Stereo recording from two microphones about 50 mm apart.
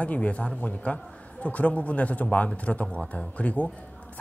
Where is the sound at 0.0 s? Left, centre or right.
Left.